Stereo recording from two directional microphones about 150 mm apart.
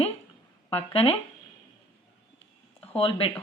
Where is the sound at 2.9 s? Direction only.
40° left (ahead or behind).